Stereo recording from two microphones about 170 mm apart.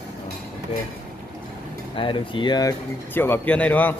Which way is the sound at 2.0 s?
30° left (ahead or behind).